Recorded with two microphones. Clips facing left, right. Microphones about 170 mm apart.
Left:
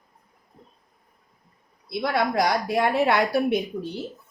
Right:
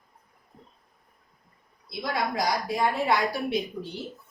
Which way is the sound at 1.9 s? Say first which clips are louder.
Left 5 dB; 65° left (ahead or behind).